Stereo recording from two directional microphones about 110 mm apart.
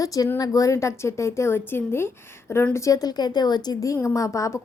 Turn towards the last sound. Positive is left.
turn(degrees=30)  # may be behind; listen again after turning